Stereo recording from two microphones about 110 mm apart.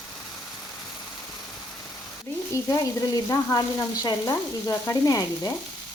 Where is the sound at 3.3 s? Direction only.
35° left (ahead or behind).